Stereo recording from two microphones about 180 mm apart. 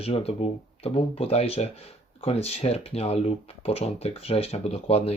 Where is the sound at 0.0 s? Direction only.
35° left (ahead or behind).